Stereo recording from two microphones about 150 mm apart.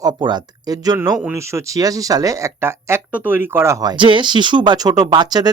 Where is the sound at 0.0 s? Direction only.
30° right (ahead or behind).